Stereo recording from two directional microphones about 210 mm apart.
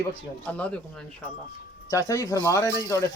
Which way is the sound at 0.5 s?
5° left (ahead or behind).